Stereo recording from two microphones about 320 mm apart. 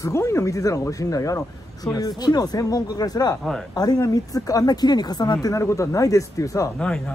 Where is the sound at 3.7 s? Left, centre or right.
Centre.